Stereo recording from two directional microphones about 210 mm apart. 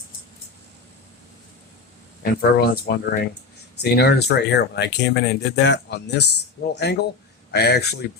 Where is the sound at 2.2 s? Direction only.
50° left (ahead or behind).